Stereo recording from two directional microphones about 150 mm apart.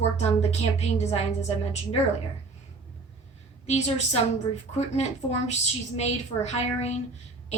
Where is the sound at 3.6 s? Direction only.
45° left (ahead or behind).